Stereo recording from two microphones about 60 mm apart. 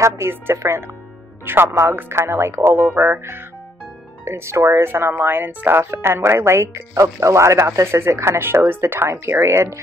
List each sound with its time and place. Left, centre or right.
0.0 s speech: right
6.9 s speech: right
9.1 s speech: right